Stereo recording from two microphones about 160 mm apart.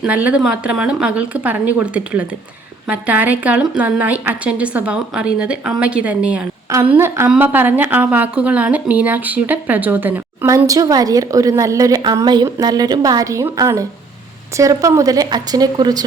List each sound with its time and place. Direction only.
0.0 s a woman's voice: 10° right (ahead or behind); by 16.0 s 25° right (ahead or behind)